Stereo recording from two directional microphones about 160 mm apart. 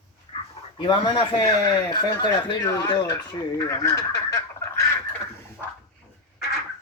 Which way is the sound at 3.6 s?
20° left (ahead or behind).